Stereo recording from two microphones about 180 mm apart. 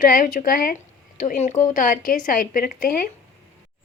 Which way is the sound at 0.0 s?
50° left (ahead or behind).